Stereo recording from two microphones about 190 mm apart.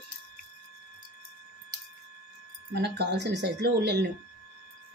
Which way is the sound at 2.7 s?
60° right (ahead or behind).